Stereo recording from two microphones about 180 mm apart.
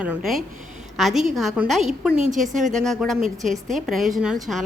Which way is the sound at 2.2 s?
45° right (ahead or behind).